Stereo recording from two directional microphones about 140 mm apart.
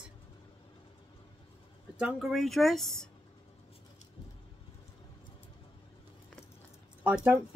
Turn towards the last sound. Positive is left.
turn(degrees=-10)  # may be behind; listen again after turning